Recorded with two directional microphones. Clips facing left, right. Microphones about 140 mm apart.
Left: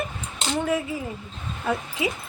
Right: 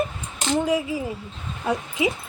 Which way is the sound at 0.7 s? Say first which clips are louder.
Right 2 dB; 15° right (ahead or behind).